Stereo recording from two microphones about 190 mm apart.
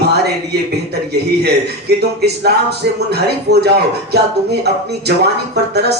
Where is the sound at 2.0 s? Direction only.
60° right (ahead or behind).